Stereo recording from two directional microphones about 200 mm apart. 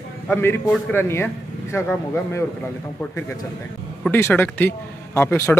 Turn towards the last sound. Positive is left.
turn(degrees=10)  # may be behind; listen again after turning